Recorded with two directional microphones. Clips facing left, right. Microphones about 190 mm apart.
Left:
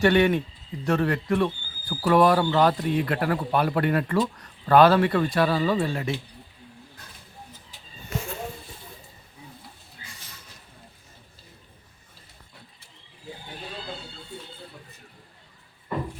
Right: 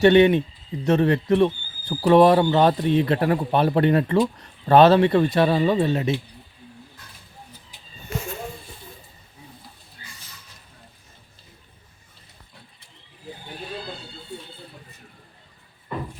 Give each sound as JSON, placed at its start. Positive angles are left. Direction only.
{"t": 0.0, "sound": "speech", "side_deg": -20}